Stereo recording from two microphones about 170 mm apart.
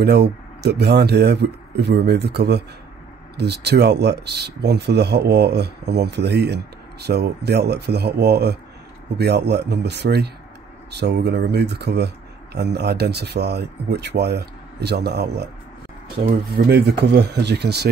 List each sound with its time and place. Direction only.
0.0 s speech: 80° right